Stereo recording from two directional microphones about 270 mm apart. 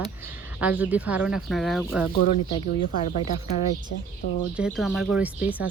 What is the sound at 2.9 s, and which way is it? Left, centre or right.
Speech, left.